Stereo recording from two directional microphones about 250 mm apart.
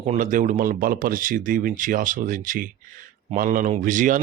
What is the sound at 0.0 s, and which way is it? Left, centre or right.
Speech, right.